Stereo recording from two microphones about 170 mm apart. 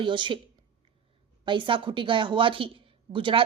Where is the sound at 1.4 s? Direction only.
30° right (ahead or behind).